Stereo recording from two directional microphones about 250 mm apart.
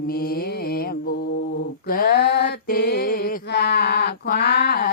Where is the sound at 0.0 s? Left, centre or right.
Left.